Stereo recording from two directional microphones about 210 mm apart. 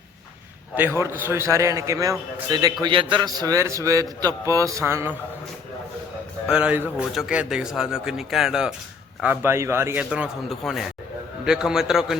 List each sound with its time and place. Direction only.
0.8 s a man's voice: 10° right (ahead or behind)
6.5 s a man's voice: 5° right (ahead or behind)